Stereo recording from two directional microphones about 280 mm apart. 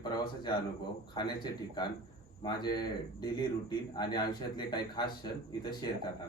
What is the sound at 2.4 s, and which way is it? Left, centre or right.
Speech, centre.